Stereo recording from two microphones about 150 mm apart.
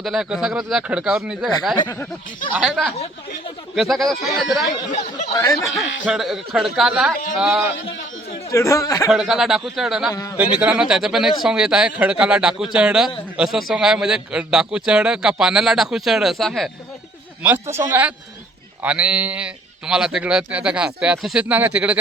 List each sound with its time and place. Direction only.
0.0 s a man's voice: 5° right (ahead or behind)
1.7 s speech: 20° left (ahead or behind)
2.5 s a man's voice: 5° right (ahead or behind)
5.3 s speech: 25° left (ahead or behind)
5.7 s a man's voice: centre (ahead or behind)
8.4 s speech: 20° left (ahead or behind)
9.0 s a man's voice: centre (ahead or behind)
10.1 s speech: 25° left (ahead or behind)
10.3 s a man's voice: 10° right (ahead or behind)
17.4 s speech: 15° right (ahead or behind)